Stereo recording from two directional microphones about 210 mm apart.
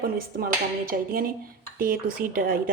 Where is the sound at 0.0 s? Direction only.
45° right (ahead or behind).